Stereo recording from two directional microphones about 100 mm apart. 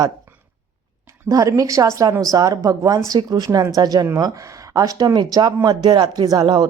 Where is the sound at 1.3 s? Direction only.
35° right (ahead or behind).